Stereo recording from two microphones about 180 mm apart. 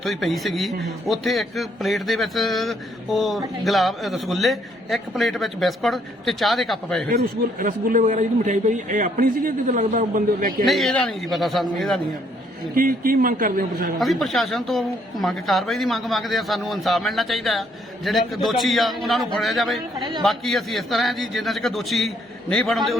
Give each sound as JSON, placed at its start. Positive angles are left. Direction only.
{"t": 0.0, "sound": "a man's voice", "side_deg": 0}
{"t": 7.6, "sound": "a man's voice", "side_deg": -50}
{"t": 10.7, "sound": "a man's voice", "side_deg": 0}
{"t": 12.7, "sound": "a man's voice", "side_deg": -50}
{"t": 14.0, "sound": "a man's voice", "side_deg": 0}